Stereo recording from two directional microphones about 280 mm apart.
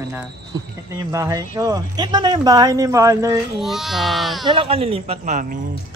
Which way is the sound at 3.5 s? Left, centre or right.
Centre.